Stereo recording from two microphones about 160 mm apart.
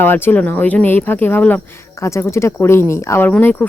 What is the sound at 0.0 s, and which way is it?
Speech, 15° left (ahead or behind).